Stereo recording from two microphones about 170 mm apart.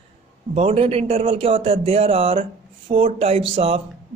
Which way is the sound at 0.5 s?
35° right (ahead or behind).